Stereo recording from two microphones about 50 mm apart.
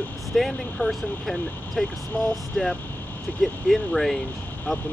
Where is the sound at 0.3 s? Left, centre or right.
Centre.